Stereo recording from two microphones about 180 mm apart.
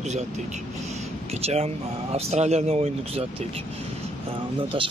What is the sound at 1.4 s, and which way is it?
A man's voice, 35° right (ahead or behind).